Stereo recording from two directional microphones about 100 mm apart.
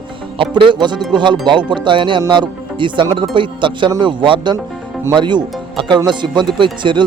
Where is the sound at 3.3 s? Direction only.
55° right (ahead or behind).